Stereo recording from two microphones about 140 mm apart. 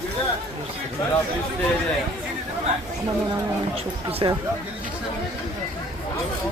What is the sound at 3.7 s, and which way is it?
Speech, 45° right (ahead or behind).